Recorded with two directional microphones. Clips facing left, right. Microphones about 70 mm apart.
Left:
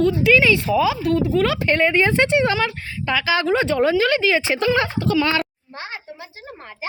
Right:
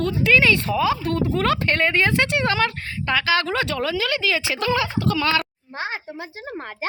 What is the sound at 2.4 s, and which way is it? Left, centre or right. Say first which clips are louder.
A woman's voice: left 1 dB; centre.